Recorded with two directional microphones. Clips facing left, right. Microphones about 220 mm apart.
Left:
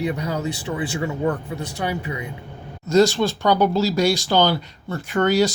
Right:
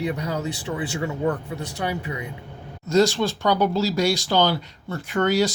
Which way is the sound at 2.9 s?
45° left (ahead or behind).